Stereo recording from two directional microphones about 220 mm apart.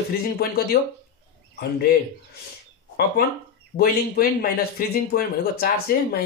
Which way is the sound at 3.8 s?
40° left (ahead or behind).